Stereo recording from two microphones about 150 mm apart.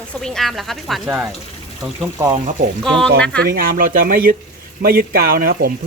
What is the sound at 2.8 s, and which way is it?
Speech, 5° left (ahead or behind).